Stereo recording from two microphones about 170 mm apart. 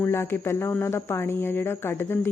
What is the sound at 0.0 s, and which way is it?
Speech, 15° left (ahead or behind).